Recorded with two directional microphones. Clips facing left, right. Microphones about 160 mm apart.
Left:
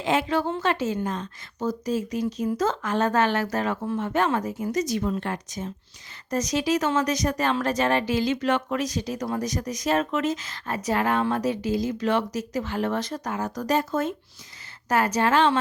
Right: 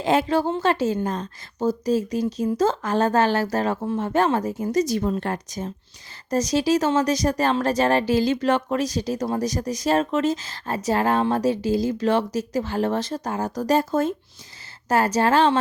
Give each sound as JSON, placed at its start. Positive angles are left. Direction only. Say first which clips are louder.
{"t": 0.0, "sound": "speech", "louder": "right 4 dB", "side_deg": -35}